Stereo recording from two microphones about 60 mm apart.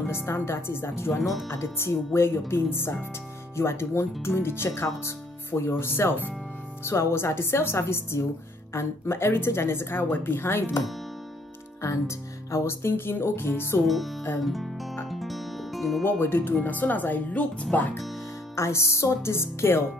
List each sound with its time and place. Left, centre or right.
0.0 s a woman's voice: left
6.8 s a woman's voice: left
11.8 s a woman's voice: left
13.8 s speech: centre
15.0 s music: centre
16.0 s speech: left
18.6 s a woman's voice: left